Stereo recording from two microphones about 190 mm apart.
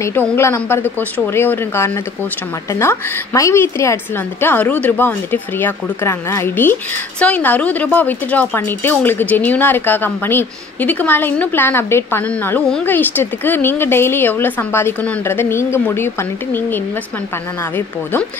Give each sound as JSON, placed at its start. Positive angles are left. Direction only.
{"t": 0.4, "sound": "a woman's voice", "side_deg": 15}